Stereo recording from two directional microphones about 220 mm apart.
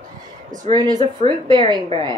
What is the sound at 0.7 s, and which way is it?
Speech, 20° right (ahead or behind).